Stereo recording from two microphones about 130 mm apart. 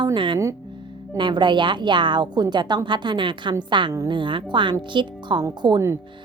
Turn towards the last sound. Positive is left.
turn(degrees=-35)  # may be behind; listen again after turning